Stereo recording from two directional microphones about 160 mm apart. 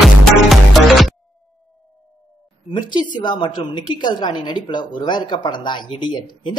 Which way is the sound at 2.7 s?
30° left (ahead or behind).